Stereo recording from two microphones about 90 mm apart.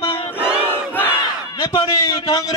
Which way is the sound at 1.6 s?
65° left (ahead or behind).